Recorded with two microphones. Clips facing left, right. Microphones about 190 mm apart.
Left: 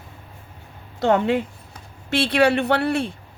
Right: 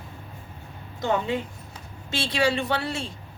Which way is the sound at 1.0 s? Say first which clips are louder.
Left 7 dB; 65° left (ahead or behind).